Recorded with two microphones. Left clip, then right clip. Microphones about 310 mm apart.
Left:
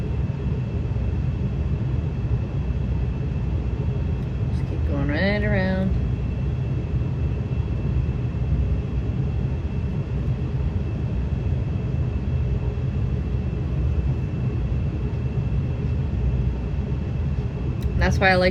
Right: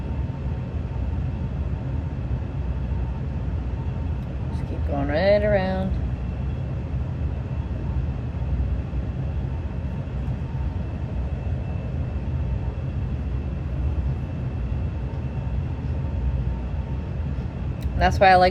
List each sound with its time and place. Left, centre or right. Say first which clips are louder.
5.0 s music: right 6 dB; centre
18.0 s speech: right 4 dB; centre